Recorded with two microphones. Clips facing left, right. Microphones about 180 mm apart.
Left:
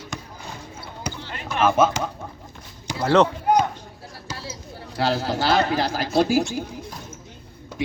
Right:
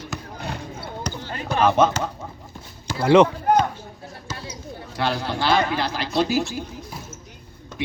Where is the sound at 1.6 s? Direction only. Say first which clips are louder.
Even; 5° left (ahead or behind).